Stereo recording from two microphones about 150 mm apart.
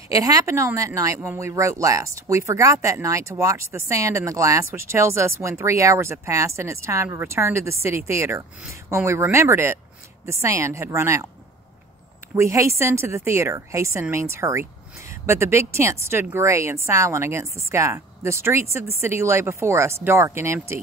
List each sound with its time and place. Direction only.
0.1 s speech: 20° right (ahead or behind)
12.4 s speech: 20° right (ahead or behind)